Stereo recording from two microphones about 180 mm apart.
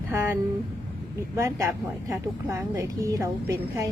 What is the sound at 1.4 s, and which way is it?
A woman's voice, 15° right (ahead or behind).